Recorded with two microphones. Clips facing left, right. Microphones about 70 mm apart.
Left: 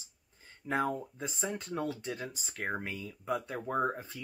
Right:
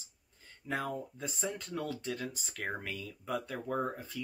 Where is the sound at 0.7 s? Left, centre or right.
Left.